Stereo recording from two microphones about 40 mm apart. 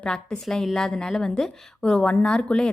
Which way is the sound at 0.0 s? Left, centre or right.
Centre.